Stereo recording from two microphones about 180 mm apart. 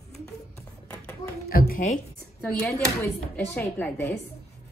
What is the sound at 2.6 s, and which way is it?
Speech, 10° left (ahead or behind).